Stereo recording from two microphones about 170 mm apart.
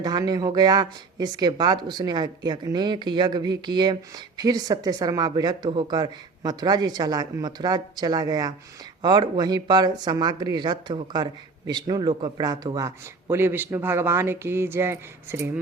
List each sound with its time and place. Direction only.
0.0 s speech: 25° right (ahead or behind)